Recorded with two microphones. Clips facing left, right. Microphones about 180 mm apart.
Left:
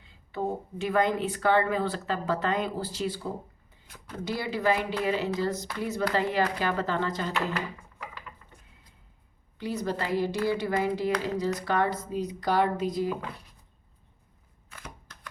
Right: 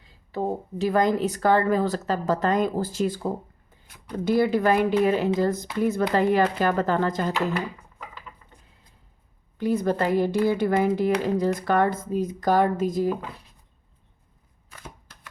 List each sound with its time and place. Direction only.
0.0 s speech: 35° right (ahead or behind)
4.3 s speech: 50° right (ahead or behind)
9.6 s speech: 50° right (ahead or behind)